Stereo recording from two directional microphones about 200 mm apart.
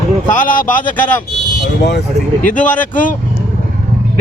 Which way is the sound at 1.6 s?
55° left (ahead or behind).